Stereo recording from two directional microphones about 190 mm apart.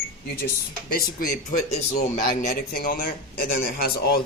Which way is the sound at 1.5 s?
35° left (ahead or behind).